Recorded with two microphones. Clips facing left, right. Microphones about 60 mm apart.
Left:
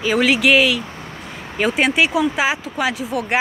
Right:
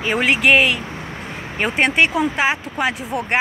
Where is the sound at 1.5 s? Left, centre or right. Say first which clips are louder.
Even; centre.